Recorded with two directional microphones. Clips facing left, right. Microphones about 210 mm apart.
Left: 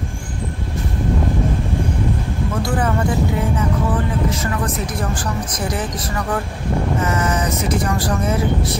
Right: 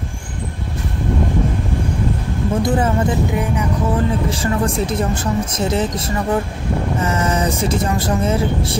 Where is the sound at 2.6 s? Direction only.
20° right (ahead or behind).